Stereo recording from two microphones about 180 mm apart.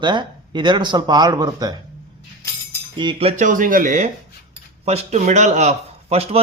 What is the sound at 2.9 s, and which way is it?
A man's voice, 25° right (ahead or behind).